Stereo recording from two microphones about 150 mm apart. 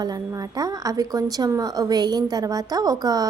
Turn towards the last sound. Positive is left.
turn(degrees=-25)  # may be behind; listen again after turning